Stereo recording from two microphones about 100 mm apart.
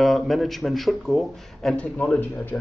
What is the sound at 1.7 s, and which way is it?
Speech, 10° left (ahead or behind).